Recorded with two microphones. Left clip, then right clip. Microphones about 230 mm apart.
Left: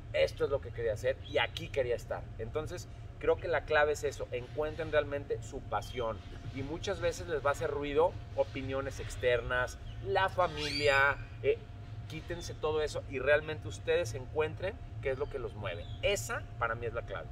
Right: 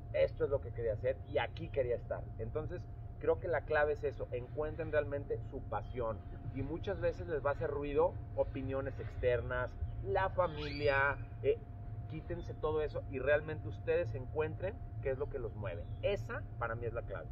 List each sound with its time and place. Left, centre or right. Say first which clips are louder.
0.1 s speech: left 3 dB; centre